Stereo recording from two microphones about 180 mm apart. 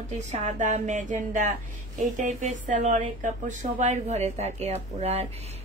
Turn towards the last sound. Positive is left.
turn(degrees=-35)  # may be behind; listen again after turning